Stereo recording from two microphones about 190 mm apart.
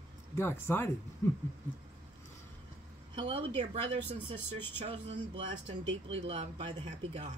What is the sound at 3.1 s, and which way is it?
Speech, 25° right (ahead or behind).